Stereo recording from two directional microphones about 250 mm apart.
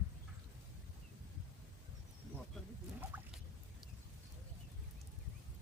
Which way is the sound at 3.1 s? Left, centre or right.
Centre.